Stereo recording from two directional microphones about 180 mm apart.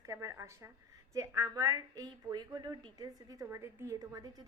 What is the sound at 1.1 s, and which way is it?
A woman's voice, 15° right (ahead or behind).